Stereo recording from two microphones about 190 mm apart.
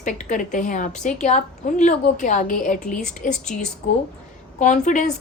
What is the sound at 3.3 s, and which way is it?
Speech, 5° left (ahead or behind).